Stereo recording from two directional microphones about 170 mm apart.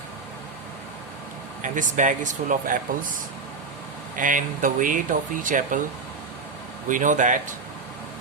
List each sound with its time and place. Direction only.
1.6 s speech: 50° right (ahead or behind)
4.1 s speech: 50° right (ahead or behind)
6.8 s speech: 50° right (ahead or behind)